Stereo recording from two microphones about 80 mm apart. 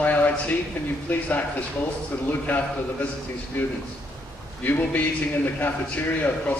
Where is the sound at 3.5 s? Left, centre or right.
Left.